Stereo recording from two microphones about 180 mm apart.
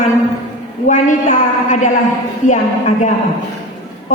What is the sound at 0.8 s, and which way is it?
A woman's voice, 45° left (ahead or behind).